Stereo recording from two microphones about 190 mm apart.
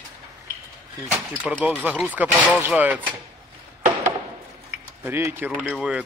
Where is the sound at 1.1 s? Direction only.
10° right (ahead or behind).